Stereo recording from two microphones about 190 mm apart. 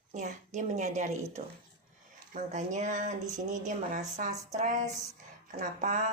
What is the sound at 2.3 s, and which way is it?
Speech, 40° right (ahead or behind).